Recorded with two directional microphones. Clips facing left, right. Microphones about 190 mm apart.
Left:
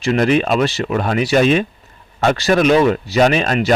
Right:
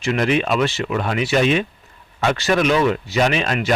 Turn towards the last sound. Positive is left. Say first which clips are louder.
# left 5 dB
turn(degrees=40)  # may be behind; listen again after turning